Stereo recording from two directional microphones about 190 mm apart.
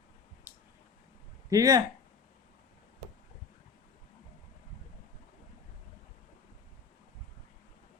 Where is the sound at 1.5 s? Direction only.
20° right (ahead or behind).